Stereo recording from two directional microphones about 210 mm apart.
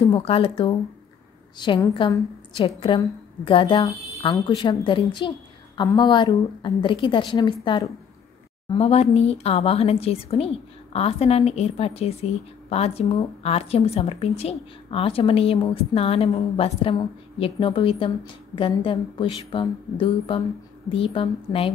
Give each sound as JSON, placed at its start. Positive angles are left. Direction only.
{"t": 0.0, "sound": "a woman's voice", "side_deg": 25}